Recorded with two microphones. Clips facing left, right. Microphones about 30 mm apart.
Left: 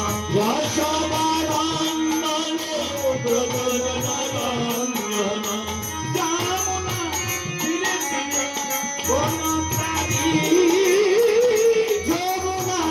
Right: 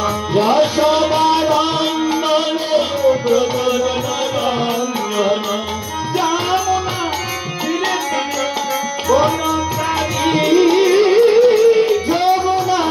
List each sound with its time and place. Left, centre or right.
0.0 s music: right
5.1 s music: right
9.0 s tabla: right
10.2 s music: right